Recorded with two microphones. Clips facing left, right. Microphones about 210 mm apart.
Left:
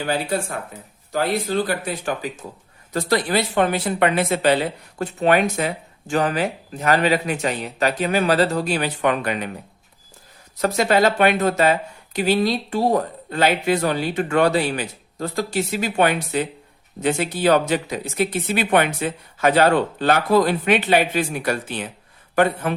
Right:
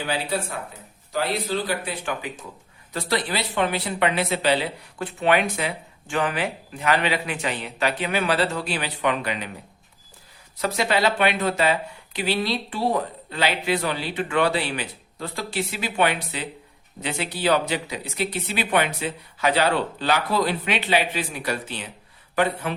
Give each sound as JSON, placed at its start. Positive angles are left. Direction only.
{"t": 0.0, "sound": "speech", "side_deg": 45}
{"t": 10.6, "sound": "speech", "side_deg": 45}